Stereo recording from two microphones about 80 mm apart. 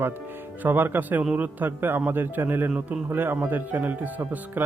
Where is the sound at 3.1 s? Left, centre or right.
Right.